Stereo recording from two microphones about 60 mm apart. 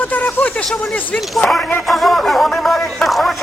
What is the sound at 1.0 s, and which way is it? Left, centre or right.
Speech, left.